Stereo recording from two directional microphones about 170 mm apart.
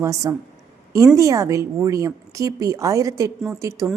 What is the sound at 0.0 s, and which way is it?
A woman's voice, 20° right (ahead or behind).